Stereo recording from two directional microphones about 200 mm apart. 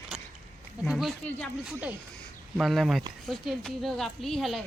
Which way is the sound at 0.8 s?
Centre (ahead or behind).